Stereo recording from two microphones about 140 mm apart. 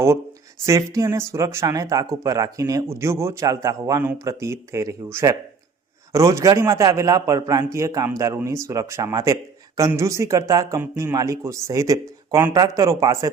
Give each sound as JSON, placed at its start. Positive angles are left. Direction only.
{"t": 0.6, "sound": "a man's voice", "side_deg": -20}